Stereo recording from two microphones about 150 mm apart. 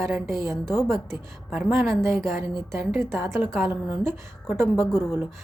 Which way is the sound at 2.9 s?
Centre (ahead or behind).